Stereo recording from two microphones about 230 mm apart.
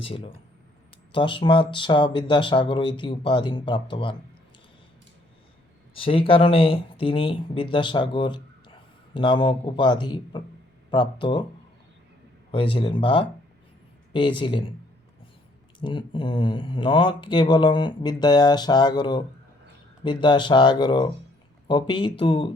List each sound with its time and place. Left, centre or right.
0.0 s speech: left
5.9 s speech: left
12.5 s speech: left
15.8 s speech: left